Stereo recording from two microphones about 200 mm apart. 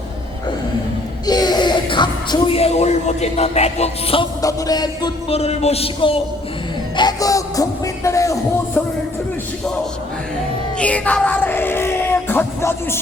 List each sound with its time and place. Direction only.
1.3 s speech: 20° left (ahead or behind)
4.4 s speech: 20° left (ahead or behind)
6.9 s music: 20° left (ahead or behind)
10.8 s a sound: 5° left (ahead or behind)